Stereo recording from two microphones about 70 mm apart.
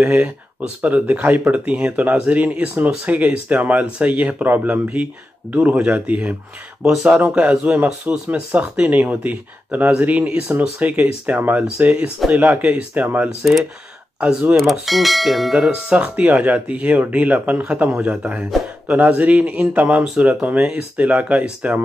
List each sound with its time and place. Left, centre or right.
0.0 s speech: right
6.8 s speech: centre
14.6 s speech: centre
15.7 s speech: centre